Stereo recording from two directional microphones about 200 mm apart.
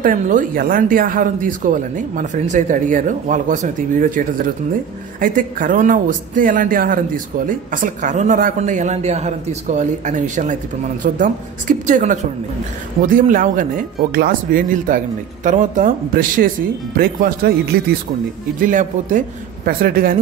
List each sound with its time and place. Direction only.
0.0 s speech: 40° right (ahead or behind)